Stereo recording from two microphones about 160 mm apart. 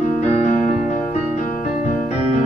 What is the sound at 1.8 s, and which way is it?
Keyboard, 50° left (ahead or behind).